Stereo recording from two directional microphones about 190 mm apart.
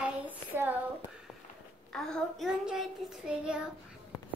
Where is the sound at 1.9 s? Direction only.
Centre (ahead or behind).